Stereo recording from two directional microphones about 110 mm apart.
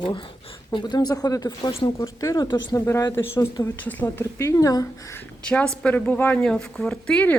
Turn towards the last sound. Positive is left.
turn(degrees=10)  # may be behind; listen again after turning